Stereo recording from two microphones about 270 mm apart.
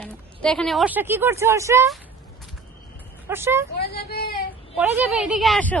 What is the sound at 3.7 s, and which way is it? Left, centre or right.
Speech, left.